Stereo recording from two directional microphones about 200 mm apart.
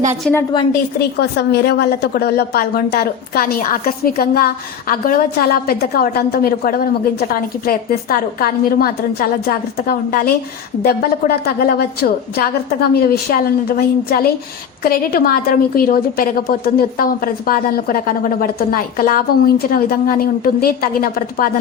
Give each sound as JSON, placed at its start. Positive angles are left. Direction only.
{"t": 0.9, "sound": "a woman's voice", "side_deg": 55}